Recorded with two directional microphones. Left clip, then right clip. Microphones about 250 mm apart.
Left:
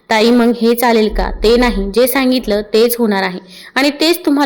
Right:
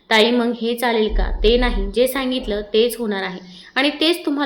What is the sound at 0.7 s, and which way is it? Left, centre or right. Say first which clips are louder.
A woman's voice: left 6 dB; left.